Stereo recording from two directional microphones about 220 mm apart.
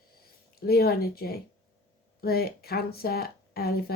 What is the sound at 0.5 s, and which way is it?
Speech, 45° left (ahead or behind).